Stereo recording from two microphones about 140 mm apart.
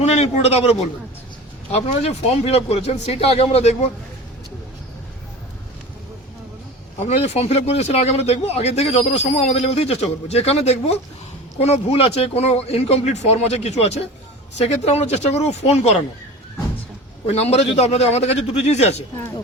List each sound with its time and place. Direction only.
0.0 s a man's voice: 50° left (ahead or behind)
7.0 s speech: 50° left (ahead or behind)
17.2 s speech: 50° left (ahead or behind)